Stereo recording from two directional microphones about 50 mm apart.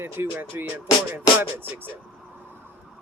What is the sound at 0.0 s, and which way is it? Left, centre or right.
Music, right.